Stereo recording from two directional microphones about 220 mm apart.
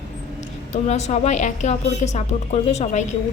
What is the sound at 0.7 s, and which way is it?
A woman's voice, 30° left (ahead or behind).